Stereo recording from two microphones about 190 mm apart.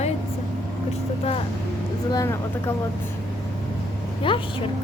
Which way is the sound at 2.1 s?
15° left (ahead or behind).